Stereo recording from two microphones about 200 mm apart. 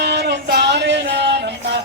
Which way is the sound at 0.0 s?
55° right (ahead or behind).